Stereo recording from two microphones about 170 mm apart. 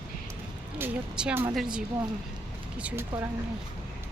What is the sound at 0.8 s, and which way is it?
Speech, 10° right (ahead or behind).